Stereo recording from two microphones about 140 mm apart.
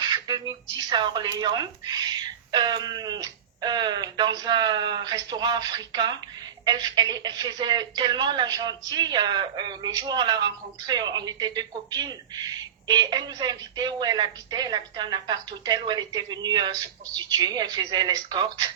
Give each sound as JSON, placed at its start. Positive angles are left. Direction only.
{"t": 0.1, "sound": "a woman's voice", "side_deg": -30}